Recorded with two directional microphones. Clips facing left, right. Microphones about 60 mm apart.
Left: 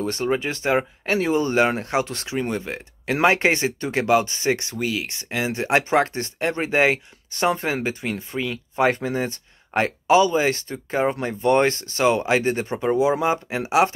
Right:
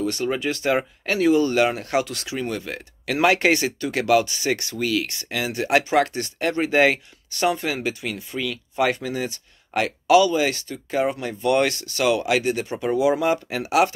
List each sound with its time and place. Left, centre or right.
0.0 s speech: left
12.7 s speech: left